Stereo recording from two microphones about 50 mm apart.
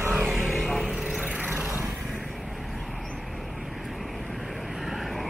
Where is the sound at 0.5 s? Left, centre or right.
Centre.